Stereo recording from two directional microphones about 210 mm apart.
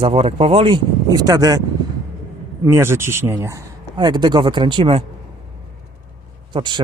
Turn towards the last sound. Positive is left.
turn(degrees=-25)  # may be behind; listen again after turning